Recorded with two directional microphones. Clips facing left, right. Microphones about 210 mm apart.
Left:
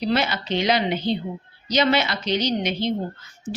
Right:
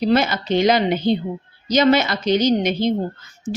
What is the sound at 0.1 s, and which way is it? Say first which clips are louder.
Speech: right 5 dB; 45° right (ahead or behind).